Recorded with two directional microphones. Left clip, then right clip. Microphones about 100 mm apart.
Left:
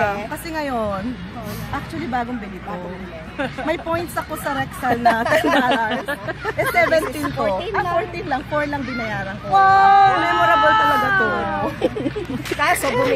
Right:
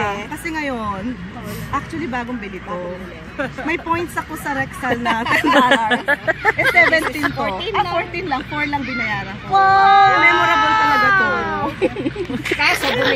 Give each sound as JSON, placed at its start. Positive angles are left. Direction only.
{"t": 3.6, "sound": "speech", "side_deg": 30}
{"t": 5.0, "sound": "speech", "side_deg": 55}
{"t": 5.6, "sound": "speech", "side_deg": -30}
{"t": 7.3, "sound": "speech", "side_deg": 35}
{"t": 8.3, "sound": "speech", "side_deg": 25}
{"t": 9.5, "sound": "speech", "side_deg": -15}
{"t": 12.5, "sound": "speech", "side_deg": 35}